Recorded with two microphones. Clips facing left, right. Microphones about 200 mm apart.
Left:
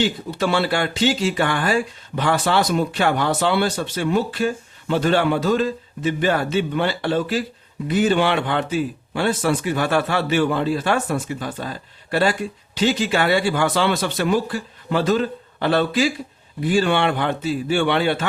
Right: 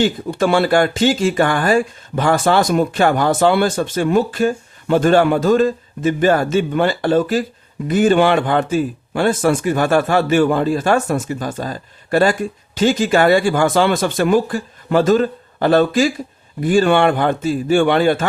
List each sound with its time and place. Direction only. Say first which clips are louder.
0.0 s a man's voice: right 5 dB; 50° right (ahead or behind)